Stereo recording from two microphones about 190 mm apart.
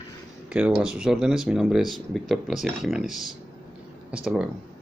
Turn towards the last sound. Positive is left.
turn(degrees=0)  # may be behind; listen again after turning